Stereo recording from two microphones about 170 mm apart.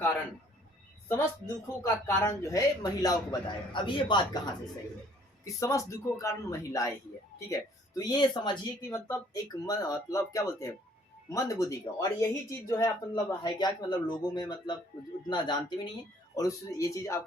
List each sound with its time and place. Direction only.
1.0 s speech: 15° left (ahead or behind)
5.5 s speech: 20° left (ahead or behind)